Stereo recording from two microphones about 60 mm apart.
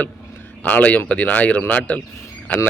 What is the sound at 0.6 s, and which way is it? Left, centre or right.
Speech, left.